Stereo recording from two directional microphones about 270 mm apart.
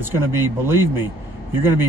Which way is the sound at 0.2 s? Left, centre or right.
Centre.